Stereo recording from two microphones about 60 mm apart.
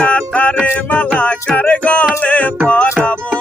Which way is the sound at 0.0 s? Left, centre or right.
Left.